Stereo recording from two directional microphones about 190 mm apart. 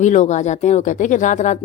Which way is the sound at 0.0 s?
40° left (ahead or behind).